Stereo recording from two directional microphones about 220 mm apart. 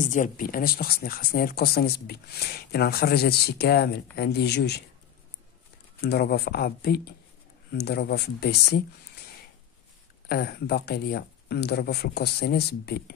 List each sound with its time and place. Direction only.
0.0 s speech: 35° left (ahead or behind)
5.9 s speech: 45° left (ahead or behind)
10.2 s speech: 45° left (ahead or behind)